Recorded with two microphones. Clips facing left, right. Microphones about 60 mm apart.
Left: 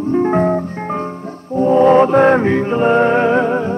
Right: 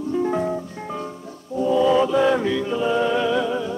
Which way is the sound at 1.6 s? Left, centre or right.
Left.